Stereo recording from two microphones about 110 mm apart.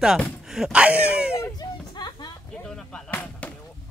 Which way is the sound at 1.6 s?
40° left (ahead or behind).